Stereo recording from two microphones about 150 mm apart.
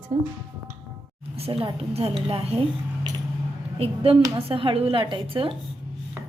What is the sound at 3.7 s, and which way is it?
A woman's voice, 40° right (ahead or behind).